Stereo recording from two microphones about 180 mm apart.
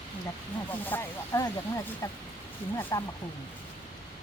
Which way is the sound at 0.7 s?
10° left (ahead or behind).